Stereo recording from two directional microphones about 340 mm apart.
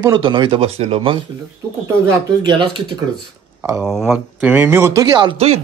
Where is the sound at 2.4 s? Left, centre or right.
Centre.